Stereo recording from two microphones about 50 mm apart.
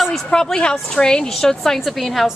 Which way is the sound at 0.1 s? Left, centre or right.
Centre.